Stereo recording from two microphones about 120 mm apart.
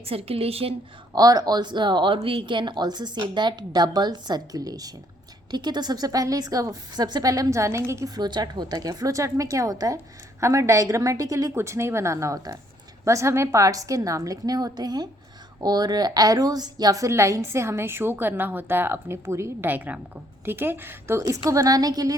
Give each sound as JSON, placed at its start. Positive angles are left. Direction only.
{"t": 0.0, "sound": "a woman's voice", "side_deg": -55}
{"t": 1.1, "sound": "a woman's voice", "side_deg": -30}